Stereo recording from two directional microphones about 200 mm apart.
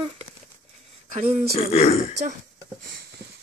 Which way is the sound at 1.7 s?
30° left (ahead or behind).